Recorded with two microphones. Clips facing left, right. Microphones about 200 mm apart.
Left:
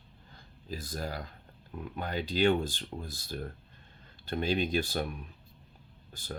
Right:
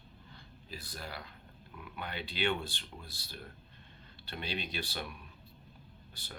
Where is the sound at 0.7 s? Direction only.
45° left (ahead or behind).